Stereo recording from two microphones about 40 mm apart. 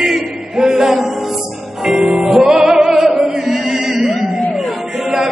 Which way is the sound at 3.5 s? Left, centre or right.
Centre.